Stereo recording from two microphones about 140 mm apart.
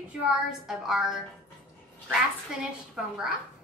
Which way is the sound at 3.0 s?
5° right (ahead or behind).